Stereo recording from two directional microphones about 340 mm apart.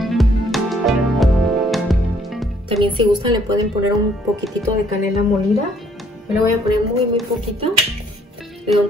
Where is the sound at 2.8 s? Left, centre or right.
Centre.